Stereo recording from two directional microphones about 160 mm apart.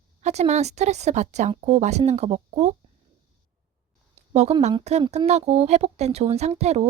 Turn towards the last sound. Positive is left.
turn(degrees=-40)  # may be behind; listen again after turning